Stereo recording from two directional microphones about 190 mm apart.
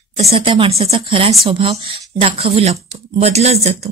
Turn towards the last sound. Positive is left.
turn(degrees=-35)  # may be behind; listen again after turning